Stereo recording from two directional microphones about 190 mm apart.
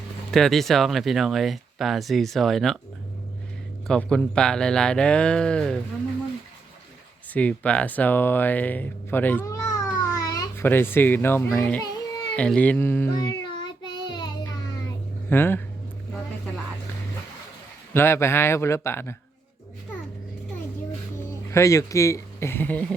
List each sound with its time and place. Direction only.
0.3 s speech: centre (ahead or behind)
3.8 s speech: 5° left (ahead or behind)
7.3 s a child's voice: 5° left (ahead or behind)
13.1 s child singing: 25° left (ahead or behind)
15.3 s speech: 10° left (ahead or behind)
17.9 s speech: 10° left (ahead or behind)
21.5 s speech: 15° left (ahead or behind)